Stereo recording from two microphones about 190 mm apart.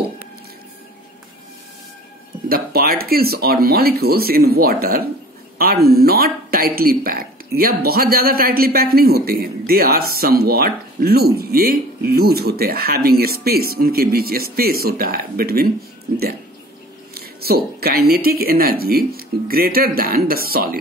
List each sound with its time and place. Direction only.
2.4 s speech: 50° right (ahead or behind)
17.1 s speech: 55° right (ahead or behind)